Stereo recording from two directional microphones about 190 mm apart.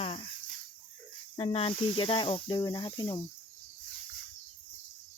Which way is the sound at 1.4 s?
30° left (ahead or behind).